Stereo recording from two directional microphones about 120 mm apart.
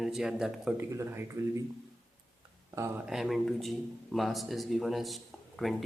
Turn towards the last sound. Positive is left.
turn(degrees=0)  # may be behind; listen again after turning